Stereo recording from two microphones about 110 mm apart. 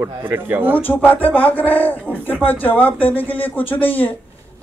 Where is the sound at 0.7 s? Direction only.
15° left (ahead or behind).